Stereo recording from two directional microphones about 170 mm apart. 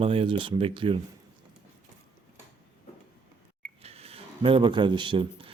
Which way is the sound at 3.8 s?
35° right (ahead or behind).